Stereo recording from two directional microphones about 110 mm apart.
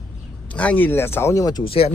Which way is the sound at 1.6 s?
60° left (ahead or behind).